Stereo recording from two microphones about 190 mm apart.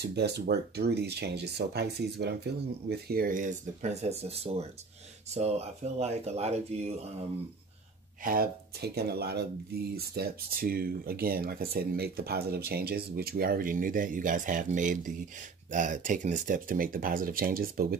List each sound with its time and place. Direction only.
0.0 s speech: 60° right (ahead or behind); by 7.2 s 35° right (ahead or behind)
8.2 s speech: 50° right (ahead or behind)